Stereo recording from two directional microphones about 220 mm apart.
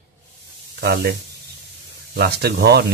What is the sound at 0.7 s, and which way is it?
Speech, 45° right (ahead or behind).